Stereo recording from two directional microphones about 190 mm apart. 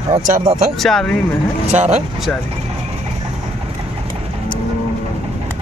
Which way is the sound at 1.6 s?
35° right (ahead or behind).